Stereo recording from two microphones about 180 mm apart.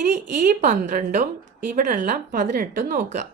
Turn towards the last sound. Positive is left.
turn(degrees=-50)  # may be behind; listen again after turning